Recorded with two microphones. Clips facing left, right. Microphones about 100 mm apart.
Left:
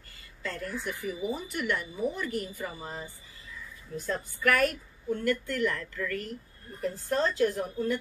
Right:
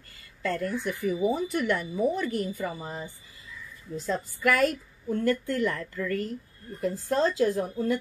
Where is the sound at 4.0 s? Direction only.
25° right (ahead or behind).